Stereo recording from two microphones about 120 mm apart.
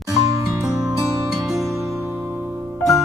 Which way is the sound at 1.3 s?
Centre (ahead or behind).